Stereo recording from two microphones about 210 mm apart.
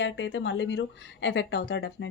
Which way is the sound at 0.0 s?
60° left (ahead or behind).